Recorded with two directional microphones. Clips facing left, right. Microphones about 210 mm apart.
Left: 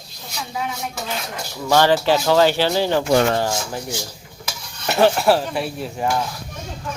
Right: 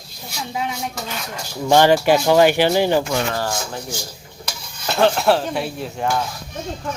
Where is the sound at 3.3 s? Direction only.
20° left (ahead or behind); by 6.1 s centre (ahead or behind).